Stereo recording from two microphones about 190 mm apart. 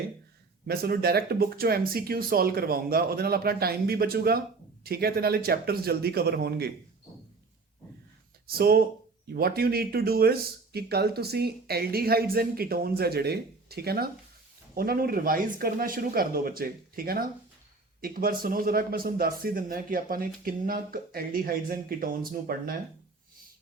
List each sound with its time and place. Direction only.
0.7 s a man's voice: 55° right (ahead or behind)
8.4 s a man's voice: 55° right (ahead or behind)